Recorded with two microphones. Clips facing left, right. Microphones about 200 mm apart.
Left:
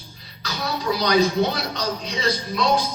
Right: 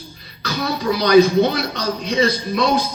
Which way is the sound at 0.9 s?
55° right (ahead or behind).